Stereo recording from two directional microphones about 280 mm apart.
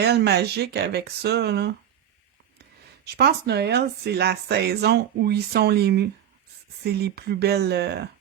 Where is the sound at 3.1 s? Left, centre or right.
Right.